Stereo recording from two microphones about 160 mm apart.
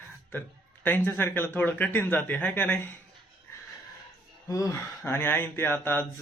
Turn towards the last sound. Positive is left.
turn(degrees=15)  # may be behind; listen again after turning